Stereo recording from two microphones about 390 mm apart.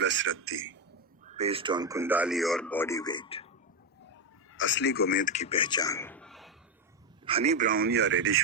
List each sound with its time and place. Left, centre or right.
0.0 s a man's voice: right
1.2 s speech: centre
4.5 s a man's voice: left; by 6.5 s centre
7.3 s a man's voice: centre